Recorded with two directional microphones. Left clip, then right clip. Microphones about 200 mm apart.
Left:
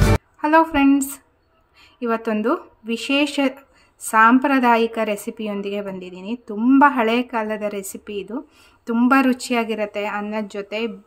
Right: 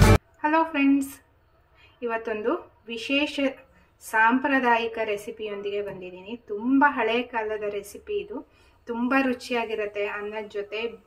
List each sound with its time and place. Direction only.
0.4 s a woman's voice: 60° left (ahead or behind)